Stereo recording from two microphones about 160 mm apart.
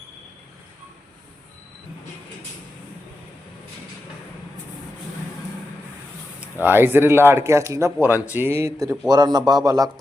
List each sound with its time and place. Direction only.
6.4 s speech: 10° right (ahead or behind)